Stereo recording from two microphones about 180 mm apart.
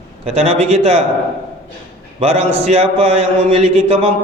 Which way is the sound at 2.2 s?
35° right (ahead or behind).